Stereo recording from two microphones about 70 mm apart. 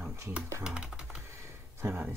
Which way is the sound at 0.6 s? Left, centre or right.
Centre.